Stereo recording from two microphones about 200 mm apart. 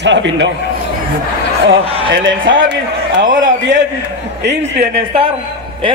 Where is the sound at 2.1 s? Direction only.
70° right (ahead or behind).